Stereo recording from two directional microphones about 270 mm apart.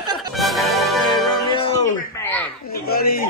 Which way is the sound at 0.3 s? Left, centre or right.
Centre.